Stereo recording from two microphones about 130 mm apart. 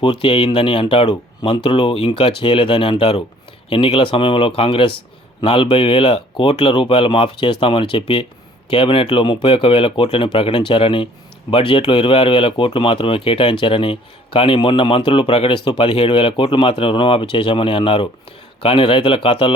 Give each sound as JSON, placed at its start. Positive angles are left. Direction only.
{"t": 0.0, "sound": "speech", "side_deg": 45}